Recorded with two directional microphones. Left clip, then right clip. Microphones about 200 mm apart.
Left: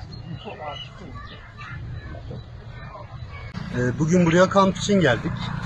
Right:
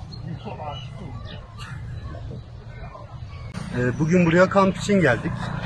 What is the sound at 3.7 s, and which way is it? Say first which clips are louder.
A man's voice: even; 10° right (ahead or behind).